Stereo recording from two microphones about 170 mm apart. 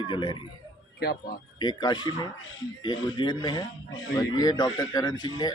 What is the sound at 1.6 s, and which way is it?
Speech, 25° left (ahead or behind).